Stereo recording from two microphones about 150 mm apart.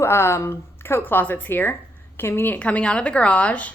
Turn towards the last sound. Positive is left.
turn(degrees=10)  # may be behind; listen again after turning